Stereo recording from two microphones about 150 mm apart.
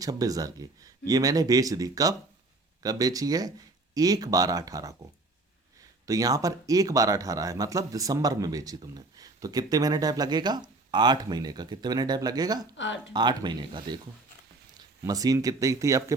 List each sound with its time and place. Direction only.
0.0 s speech: 25° right (ahead or behind)
6.1 s speech: 25° right (ahead or behind)
15.0 s speech: 25° right (ahead or behind)